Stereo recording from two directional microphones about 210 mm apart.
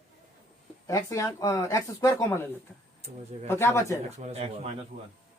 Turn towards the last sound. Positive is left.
turn(degrees=-30)  # may be behind; listen again after turning